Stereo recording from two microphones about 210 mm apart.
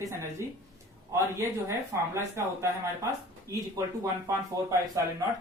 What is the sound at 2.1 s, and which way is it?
Speech, 10° right (ahead or behind).